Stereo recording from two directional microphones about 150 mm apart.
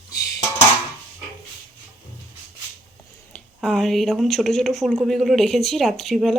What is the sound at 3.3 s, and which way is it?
Speech, centre (ahead or behind).